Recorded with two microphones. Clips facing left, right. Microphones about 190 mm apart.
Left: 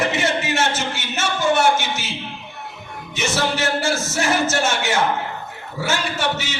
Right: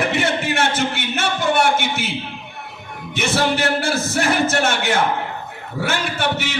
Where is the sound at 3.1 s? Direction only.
60° right (ahead or behind).